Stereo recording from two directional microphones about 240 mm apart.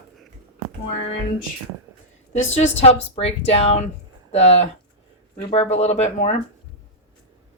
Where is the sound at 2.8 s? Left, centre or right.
Left.